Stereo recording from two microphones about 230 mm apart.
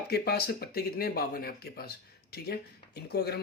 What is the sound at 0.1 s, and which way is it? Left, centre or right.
Speech, left.